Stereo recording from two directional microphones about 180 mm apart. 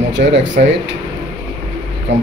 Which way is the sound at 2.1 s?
85° right.